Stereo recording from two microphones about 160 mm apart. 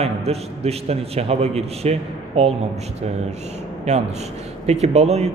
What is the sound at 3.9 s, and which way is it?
Speech, 45° right (ahead or behind).